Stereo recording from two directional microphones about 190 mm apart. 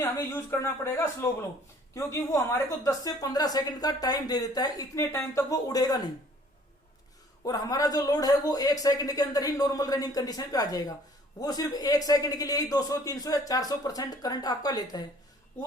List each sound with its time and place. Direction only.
0.0 s a woman's voice: 15° left (ahead or behind)
7.4 s a woman's voice: 20° left (ahead or behind)